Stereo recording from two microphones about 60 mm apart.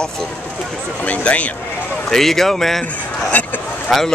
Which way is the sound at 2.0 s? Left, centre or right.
Centre.